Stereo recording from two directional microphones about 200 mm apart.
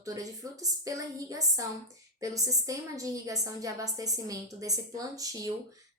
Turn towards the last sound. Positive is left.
turn(degrees=-15)  # may be behind; listen again after turning